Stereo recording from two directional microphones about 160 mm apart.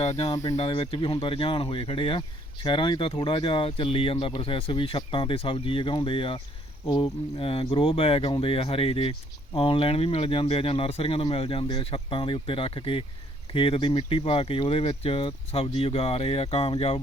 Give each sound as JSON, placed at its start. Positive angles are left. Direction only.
{"t": 0.0, "sound": "speech", "side_deg": 35}
{"t": 7.3, "sound": "speech", "side_deg": 35}